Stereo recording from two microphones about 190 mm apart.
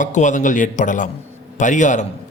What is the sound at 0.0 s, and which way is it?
A man's voice, 40° left (ahead or behind).